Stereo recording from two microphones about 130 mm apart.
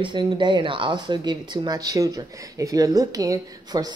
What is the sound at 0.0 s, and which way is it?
A woman's voice, 40° right (ahead or behind).